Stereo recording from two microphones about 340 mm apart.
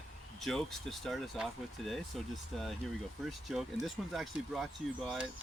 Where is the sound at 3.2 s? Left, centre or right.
Centre.